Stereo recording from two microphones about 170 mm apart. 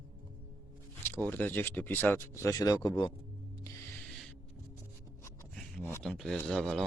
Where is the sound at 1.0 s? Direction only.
10° left (ahead or behind).